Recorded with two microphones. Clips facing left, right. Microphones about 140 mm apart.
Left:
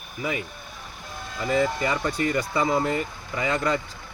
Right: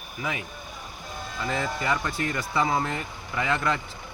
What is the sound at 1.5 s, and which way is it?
Speech, 10° left (ahead or behind).